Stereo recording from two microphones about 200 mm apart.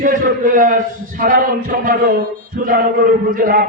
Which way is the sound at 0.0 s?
40° right (ahead or behind).